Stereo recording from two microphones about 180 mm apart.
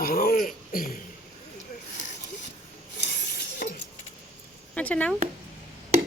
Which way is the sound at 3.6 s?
55° left (ahead or behind).